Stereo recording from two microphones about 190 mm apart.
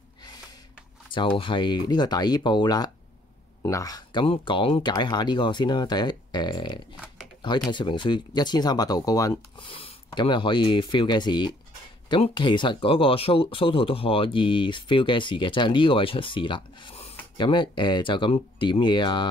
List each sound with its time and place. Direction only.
1.4 s speech: 25° left (ahead or behind)